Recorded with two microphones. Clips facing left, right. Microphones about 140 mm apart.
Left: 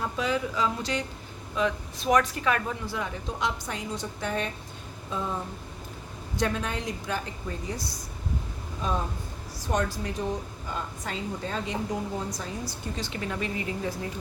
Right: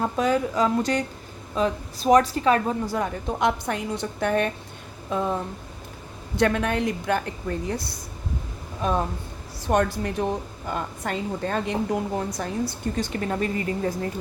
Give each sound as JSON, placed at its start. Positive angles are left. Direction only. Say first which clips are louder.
{"t": 0.0, "sound": "a woman's voice", "louder": "right 6 dB", "side_deg": -45}
{"t": 1.5, "sound": "a woman's voice", "louder": "right 3 dB", "side_deg": -35}
{"t": 6.3, "sound": "a woman's voice", "louder": "right 7 dB", "side_deg": -65}